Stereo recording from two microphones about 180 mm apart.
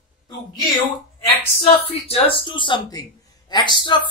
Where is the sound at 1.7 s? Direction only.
35° left (ahead or behind).